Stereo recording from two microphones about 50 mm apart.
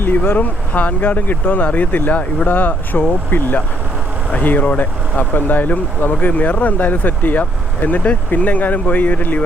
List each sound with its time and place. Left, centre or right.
0.3 s speech: left